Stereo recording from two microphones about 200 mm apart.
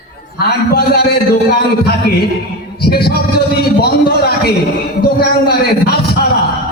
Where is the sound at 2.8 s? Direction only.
50° left (ahead or behind).